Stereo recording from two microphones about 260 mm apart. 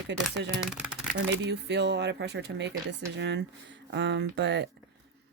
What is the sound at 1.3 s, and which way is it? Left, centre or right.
Speech, right.